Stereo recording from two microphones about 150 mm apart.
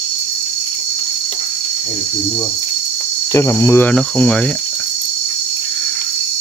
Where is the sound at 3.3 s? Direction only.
20° left (ahead or behind).